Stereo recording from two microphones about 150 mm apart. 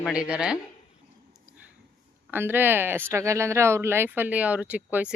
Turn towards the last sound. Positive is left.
turn(degrees=-10)  # may be behind; listen again after turning